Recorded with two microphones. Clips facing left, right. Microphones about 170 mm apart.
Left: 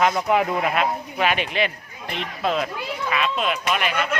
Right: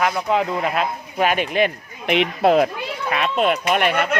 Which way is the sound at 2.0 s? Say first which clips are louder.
Right 9 dB; 70° right (ahead or behind).